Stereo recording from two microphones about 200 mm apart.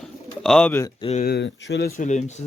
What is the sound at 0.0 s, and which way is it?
Bird, 5° left (ahead or behind).